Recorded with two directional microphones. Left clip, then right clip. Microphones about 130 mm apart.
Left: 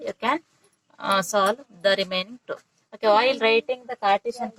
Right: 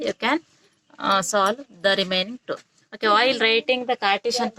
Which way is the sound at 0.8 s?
20° right (ahead or behind).